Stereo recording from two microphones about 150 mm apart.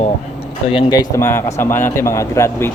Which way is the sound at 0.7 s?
30° left (ahead or behind).